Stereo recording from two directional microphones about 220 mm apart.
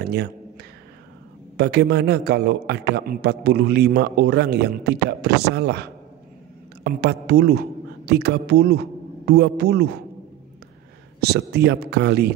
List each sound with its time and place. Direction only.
0.0 s a man's voice: 45° right (ahead or behind)
1.6 s a man's voice: 50° right (ahead or behind)
11.1 s a man's voice: 45° right (ahead or behind)